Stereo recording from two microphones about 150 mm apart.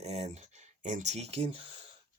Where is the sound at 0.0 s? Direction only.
45° right (ahead or behind).